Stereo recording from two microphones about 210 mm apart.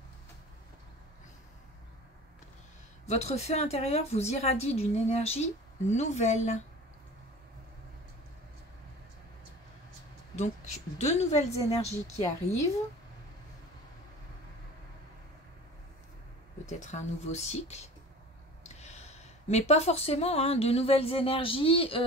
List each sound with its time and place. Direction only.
3.1 s a woman's voice: 30° left (ahead or behind)
10.3 s a woman's voice: 35° left (ahead or behind)
16.6 s a woman's voice: 35° left (ahead or behind)